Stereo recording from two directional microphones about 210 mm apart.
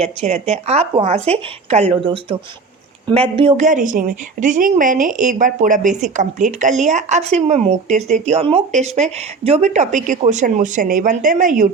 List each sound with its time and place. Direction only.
0.0 s a woman's voice: 30° right (ahead or behind)